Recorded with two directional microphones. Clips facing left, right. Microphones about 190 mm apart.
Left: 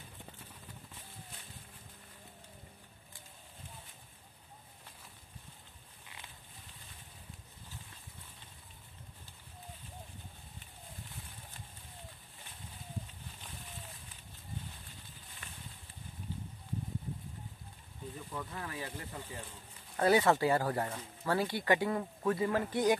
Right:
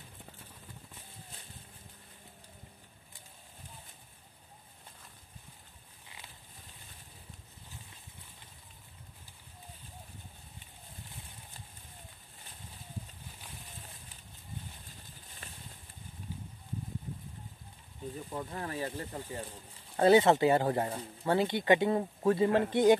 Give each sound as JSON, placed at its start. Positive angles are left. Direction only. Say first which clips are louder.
{"t": 15.4, "sound": "a sound", "louder": "right 2 dB", "side_deg": -35}
{"t": 18.3, "sound": "speech", "louder": "right 4 dB", "side_deg": -35}
{"t": 20.1, "sound": "speech", "louder": "right 4 dB", "side_deg": -25}